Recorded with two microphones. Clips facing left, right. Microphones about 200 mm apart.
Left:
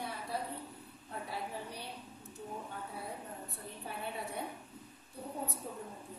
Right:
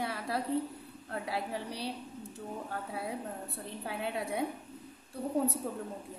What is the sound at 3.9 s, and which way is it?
Speech, 85° right.